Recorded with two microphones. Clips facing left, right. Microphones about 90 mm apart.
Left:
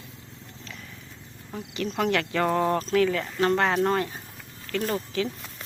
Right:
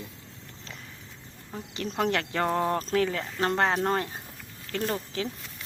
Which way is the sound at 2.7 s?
35° right (ahead or behind).